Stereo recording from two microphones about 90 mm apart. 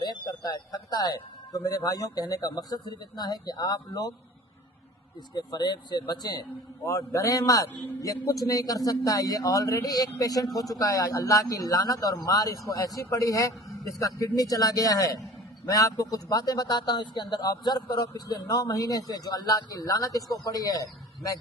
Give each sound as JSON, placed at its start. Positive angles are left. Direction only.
{"t": 0.0, "sound": "speech", "side_deg": 50}
{"t": 5.3, "sound": "speech", "side_deg": 50}
{"t": 6.8, "sound": "speech", "side_deg": 35}